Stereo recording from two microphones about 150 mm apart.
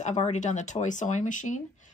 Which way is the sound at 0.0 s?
50° left (ahead or behind).